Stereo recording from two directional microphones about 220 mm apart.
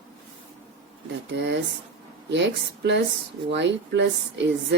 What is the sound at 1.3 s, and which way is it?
A woman's voice, 55° right (ahead or behind).